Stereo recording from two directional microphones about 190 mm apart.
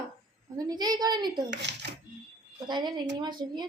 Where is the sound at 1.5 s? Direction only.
65° right (ahead or behind).